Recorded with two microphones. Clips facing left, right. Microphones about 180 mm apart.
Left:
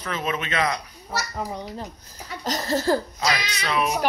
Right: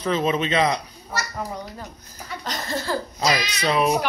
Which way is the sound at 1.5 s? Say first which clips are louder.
Left 1 dB; 25° left (ahead or behind).